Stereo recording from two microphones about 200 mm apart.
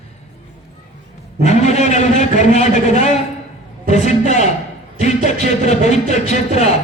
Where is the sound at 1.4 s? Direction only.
35° left (ahead or behind).